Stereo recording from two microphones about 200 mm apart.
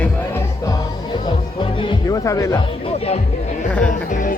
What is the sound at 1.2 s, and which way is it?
Music, 25° left (ahead or behind).